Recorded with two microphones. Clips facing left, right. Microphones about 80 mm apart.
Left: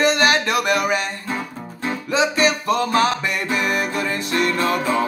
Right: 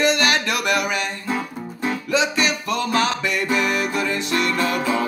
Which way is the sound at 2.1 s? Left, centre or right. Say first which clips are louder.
Left 3 dB; left.